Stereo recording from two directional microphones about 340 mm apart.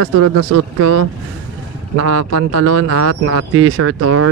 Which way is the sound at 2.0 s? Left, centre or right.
Right.